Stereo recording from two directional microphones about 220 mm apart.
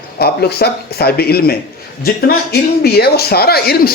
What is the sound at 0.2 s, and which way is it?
Speech, 45° left (ahead or behind).